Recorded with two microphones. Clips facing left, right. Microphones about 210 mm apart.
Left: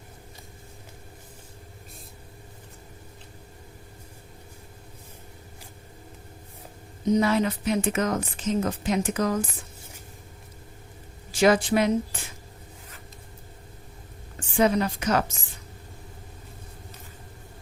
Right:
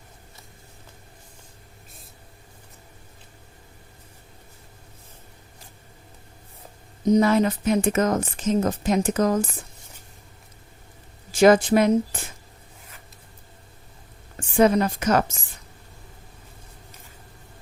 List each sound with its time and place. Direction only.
7.1 s a woman's voice: 45° right (ahead or behind)
11.3 s a woman's voice: 45° right (ahead or behind)
14.3 s a woman's voice: 45° right (ahead or behind)